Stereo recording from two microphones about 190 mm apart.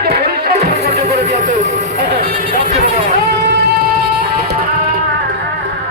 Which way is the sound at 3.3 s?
55° right (ahead or behind).